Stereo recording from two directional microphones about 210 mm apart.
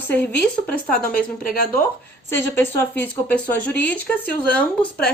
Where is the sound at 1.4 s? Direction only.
40° left (ahead or behind).